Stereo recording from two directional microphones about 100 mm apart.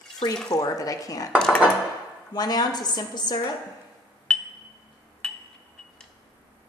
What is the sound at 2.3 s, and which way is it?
A woman's voice, 40° left (ahead or behind).